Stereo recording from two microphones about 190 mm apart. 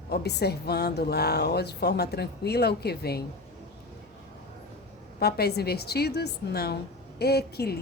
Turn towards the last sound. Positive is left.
turn(degrees=55)  # may be behind; listen again after turning